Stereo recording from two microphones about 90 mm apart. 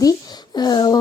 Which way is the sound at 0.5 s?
50° left (ahead or behind).